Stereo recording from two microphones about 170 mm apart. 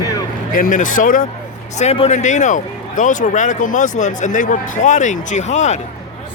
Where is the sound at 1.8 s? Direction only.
40° left (ahead or behind).